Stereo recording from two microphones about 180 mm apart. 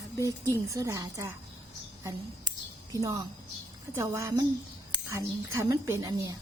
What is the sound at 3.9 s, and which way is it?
A woman's voice, 15° right (ahead or behind).